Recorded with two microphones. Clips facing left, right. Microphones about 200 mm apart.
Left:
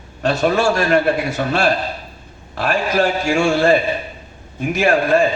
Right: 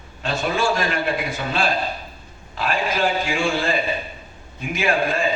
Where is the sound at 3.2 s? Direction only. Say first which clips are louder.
Left 7 dB; 45° left (ahead or behind).